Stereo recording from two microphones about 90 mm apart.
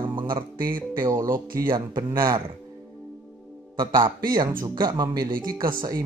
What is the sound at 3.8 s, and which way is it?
Speech, 50° right (ahead or behind).